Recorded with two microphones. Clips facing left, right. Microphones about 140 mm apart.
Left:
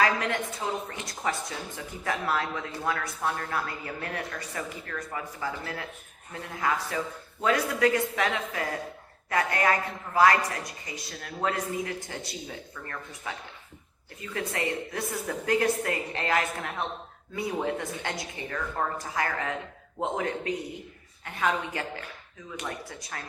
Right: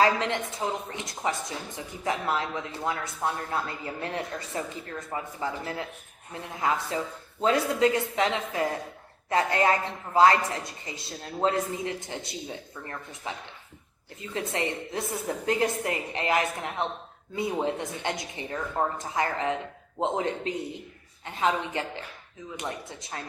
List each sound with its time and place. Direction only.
0.0 s a woman's voice: 25° right (ahead or behind)